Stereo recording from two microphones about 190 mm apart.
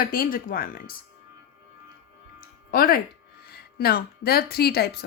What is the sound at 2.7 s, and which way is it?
Speech, 50° left (ahead or behind).